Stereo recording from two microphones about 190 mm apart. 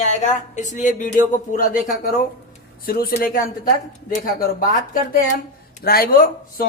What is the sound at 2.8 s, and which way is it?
Speech, 50° left (ahead or behind).